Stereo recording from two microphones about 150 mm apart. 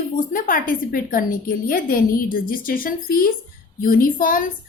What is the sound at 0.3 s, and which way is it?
A woman's voice, 65° left (ahead or behind).